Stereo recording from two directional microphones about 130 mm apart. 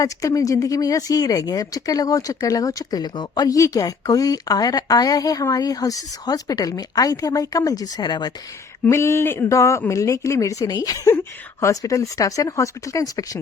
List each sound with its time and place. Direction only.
0.0 s speech: 25° left (ahead or behind)
8.9 s speech: 20° left (ahead or behind)